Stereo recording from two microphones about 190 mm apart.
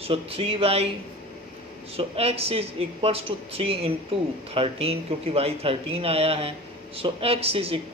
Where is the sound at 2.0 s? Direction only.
30° right (ahead or behind).